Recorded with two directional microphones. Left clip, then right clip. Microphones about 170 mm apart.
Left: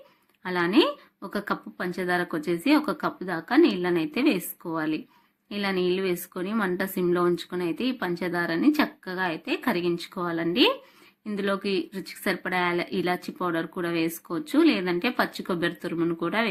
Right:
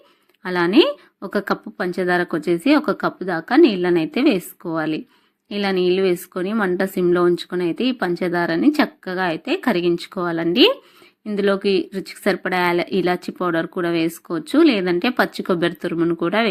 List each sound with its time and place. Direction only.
0.4 s speech: 35° right (ahead or behind)